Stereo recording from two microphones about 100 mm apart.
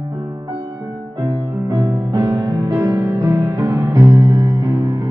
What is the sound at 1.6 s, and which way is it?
Music, 40° right (ahead or behind).